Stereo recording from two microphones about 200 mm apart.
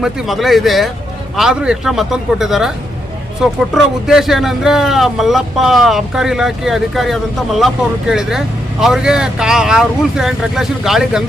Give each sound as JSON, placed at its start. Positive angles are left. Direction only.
{"t": 0.0, "sound": "speech", "side_deg": 0}